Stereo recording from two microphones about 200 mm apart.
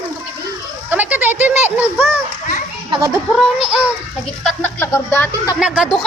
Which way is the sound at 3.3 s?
5° right (ahead or behind).